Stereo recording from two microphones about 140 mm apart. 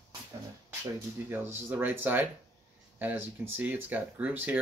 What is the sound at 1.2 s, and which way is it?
Speech, 15° right (ahead or behind).